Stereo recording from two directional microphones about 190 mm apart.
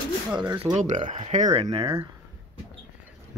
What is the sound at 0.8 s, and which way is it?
Speech, 40° right (ahead or behind).